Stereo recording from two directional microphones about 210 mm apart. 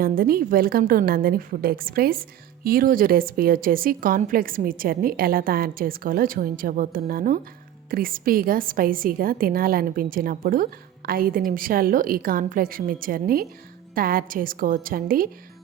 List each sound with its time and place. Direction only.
0.0 s a woman's voice: 45° right (ahead or behind)